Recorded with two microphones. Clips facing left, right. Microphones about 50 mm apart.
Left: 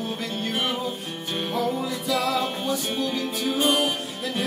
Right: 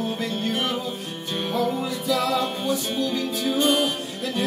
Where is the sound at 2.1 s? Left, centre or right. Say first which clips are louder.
Right 1 dB; centre.